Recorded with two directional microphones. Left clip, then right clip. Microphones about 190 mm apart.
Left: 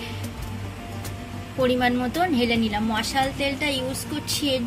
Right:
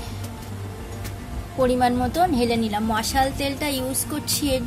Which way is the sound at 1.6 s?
Centre (ahead or behind).